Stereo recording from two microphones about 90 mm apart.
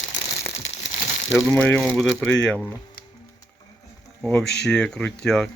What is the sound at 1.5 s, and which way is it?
Speech, 20° left (ahead or behind).